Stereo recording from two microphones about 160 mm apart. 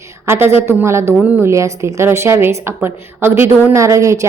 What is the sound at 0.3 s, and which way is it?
A woman's voice, 15° right (ahead or behind).